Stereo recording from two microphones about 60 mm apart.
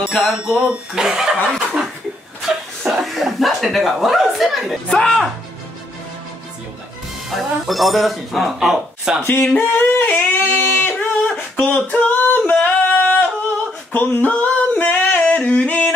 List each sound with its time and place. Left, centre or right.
0.1 s a man's voice: centre
7.2 s a man's voice: centre
9.6 s yodeling: left
11.5 s a sound: left
12.2 s yodeling: left
13.9 s singing: left